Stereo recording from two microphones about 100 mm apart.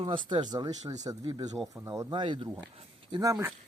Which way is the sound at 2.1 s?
55° right (ahead or behind).